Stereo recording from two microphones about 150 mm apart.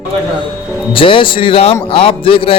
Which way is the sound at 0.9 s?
35° left (ahead or behind).